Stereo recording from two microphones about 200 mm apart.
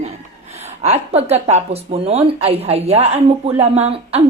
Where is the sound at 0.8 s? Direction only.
30° right (ahead or behind).